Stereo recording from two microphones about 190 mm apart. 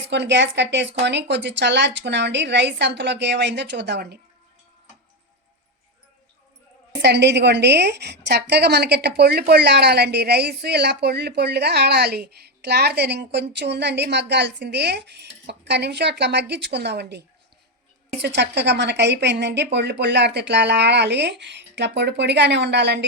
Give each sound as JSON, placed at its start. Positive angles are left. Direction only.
{"t": 0.1, "sound": "a woman's voice", "side_deg": -65}
{"t": 7.0, "sound": "a woman's voice", "side_deg": -65}